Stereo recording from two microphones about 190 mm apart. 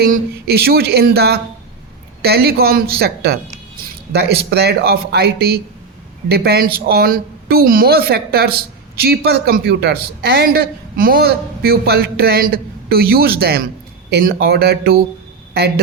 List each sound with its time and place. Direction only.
0.0 s speech: 55° right (ahead or behind)